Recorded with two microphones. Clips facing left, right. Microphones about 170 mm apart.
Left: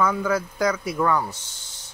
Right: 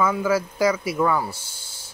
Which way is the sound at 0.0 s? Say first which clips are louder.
Right 1 dB; 5° right (ahead or behind).